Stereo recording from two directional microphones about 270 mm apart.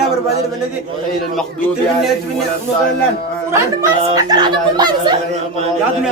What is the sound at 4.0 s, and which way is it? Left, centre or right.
Speech, centre.